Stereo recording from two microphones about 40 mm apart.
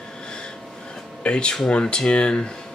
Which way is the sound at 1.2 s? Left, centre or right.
Left.